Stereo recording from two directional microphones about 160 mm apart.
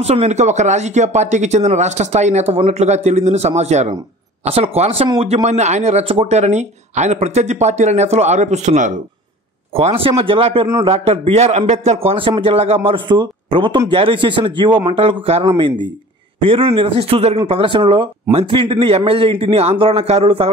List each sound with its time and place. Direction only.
0.0 s a man's voice: 45° right (ahead or behind)
9.8 s a man's voice: 35° right (ahead or behind)